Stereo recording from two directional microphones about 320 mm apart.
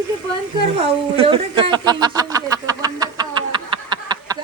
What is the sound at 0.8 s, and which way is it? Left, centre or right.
Speech, centre.